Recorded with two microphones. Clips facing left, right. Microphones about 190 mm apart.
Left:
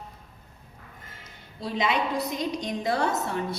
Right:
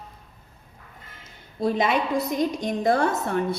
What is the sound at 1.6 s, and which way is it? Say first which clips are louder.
A woman's voice: right 4 dB; 50° right (ahead or behind).